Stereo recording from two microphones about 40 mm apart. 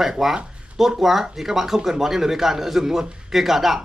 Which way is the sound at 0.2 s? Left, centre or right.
Centre.